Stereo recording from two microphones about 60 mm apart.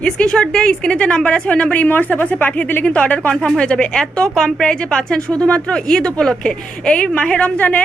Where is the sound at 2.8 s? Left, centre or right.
Centre.